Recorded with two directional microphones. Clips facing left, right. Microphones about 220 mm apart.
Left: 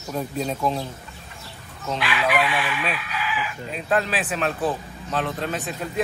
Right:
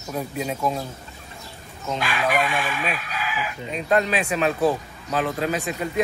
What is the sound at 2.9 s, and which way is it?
Speech, 45° right (ahead or behind).